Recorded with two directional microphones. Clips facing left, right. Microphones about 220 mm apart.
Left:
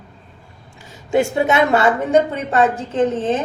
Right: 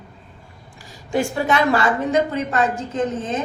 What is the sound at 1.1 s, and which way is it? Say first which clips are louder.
A woman's voice: left 4 dB; 25° left (ahead or behind).